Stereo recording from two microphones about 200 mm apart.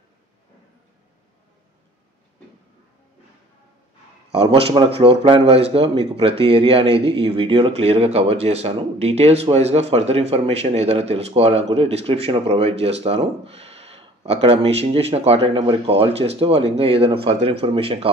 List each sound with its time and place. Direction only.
4.3 s a man's voice: 30° right (ahead or behind)